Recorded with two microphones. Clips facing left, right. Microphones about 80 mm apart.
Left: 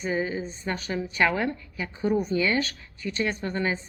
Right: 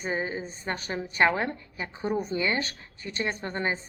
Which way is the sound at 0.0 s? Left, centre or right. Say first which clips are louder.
Left 3 dB; right.